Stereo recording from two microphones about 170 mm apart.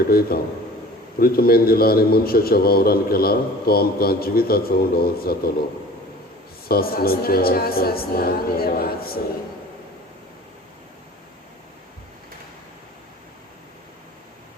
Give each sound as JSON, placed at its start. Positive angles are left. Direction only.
{"t": 0.1, "sound": "a man's voice", "side_deg": 65}
{"t": 6.7, "sound": "a man's voice", "side_deg": 65}